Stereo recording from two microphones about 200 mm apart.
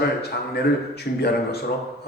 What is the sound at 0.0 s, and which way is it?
Speech, 55° left (ahead or behind).